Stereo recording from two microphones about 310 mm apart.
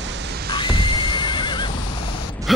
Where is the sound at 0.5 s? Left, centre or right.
Centre.